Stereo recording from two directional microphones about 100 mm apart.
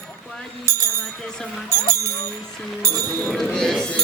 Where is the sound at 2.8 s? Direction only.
35° right (ahead or behind).